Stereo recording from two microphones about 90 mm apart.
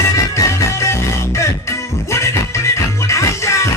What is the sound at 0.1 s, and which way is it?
Music, 35° left (ahead or behind).